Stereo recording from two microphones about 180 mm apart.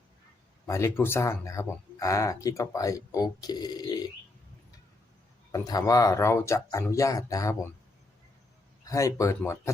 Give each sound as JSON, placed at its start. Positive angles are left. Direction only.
{"t": 0.7, "sound": "speech", "side_deg": 15}
{"t": 5.5, "sound": "speech", "side_deg": 20}
{"t": 8.8, "sound": "speech", "side_deg": 20}